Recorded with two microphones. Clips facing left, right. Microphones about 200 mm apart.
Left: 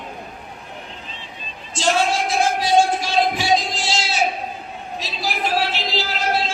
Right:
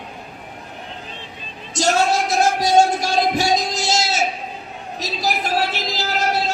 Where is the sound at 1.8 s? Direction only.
40° right (ahead or behind).